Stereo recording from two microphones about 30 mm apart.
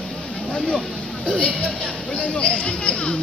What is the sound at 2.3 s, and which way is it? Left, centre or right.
Speech, left.